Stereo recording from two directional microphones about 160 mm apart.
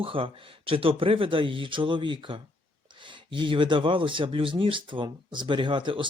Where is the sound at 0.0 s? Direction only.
35° right (ahead or behind).